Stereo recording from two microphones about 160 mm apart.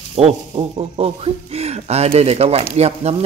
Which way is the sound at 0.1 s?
35° right (ahead or behind).